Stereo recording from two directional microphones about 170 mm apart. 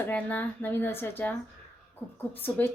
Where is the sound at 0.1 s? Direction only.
10° left (ahead or behind).